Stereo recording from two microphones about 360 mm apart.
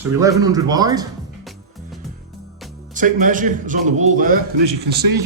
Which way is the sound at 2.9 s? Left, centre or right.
Right.